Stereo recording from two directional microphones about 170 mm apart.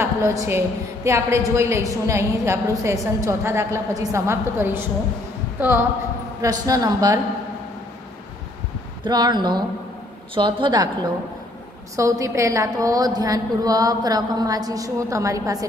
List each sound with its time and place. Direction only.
0.0 s a woman's voice: 20° right (ahead or behind)
9.0 s a woman's voice: 25° right (ahead or behind)
12.0 s a woman's voice: 20° right (ahead or behind)